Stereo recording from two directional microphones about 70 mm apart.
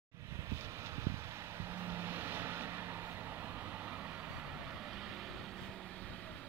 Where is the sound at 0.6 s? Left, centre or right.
Right; by 5.5 s centre.